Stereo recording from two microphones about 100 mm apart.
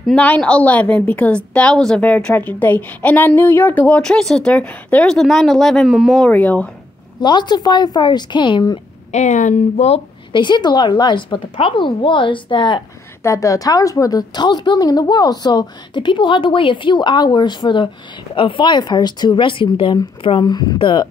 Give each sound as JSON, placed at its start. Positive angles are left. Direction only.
{"t": 0.1, "sound": "a woman's voice", "side_deg": 10}
{"t": 5.9, "sound": "speech", "side_deg": -5}
{"t": 6.3, "sound": "a woman's voice", "side_deg": 15}
{"t": 7.2, "sound": "a woman's voice", "side_deg": 50}
{"t": 9.8, "sound": "speech", "side_deg": 90}
{"t": 10.3, "sound": "a woman's voice", "side_deg": 50}
{"t": 13.2, "sound": "a woman's voice", "side_deg": 30}
{"t": 20.4, "sound": "a woman's voice", "side_deg": 45}